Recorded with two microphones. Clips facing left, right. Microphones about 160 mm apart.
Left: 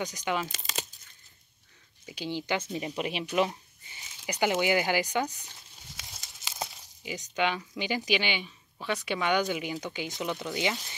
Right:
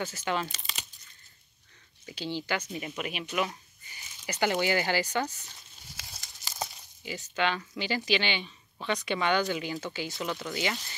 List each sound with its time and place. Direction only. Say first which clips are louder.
0.0 s speech: even; 15° left (ahead or behind)
2.0 s speech: left 1 dB; 15° left (ahead or behind); by 3.3 s 30° left (ahead or behind)
3.3 s a sound: left 4 dB; 25° left (ahead or behind)
4.3 s speech: left 1 dB; 15° left (ahead or behind)
7.0 s speech: left 1 dB; 15° left (ahead or behind)